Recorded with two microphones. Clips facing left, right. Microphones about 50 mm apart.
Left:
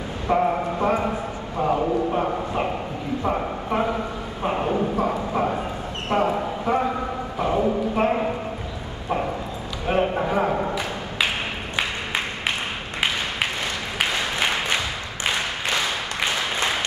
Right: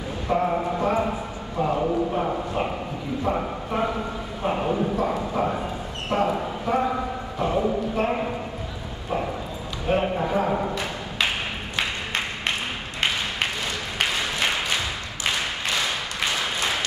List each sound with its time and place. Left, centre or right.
0.3 s a man's voice: centre
6.1 s a man's voice: centre
9.8 s a man's voice: centre
10.5 s a sound: centre